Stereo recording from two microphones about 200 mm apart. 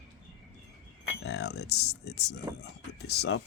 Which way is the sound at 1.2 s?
55° left (ahead or behind).